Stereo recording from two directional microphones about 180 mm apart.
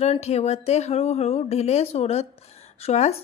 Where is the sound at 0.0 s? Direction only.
35° left (ahead or behind).